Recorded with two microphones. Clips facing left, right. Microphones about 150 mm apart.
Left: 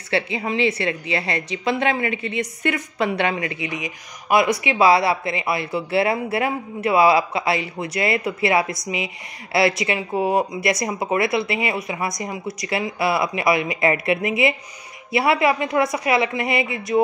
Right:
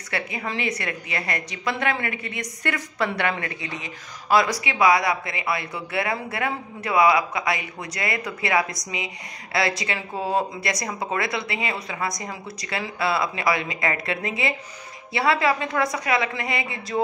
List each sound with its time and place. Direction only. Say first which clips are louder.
0.1 s a woman's voice: left 6 dB; 25° left (ahead or behind)